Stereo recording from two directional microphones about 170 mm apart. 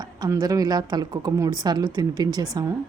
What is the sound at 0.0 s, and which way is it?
A woman's voice, 20° right (ahead or behind).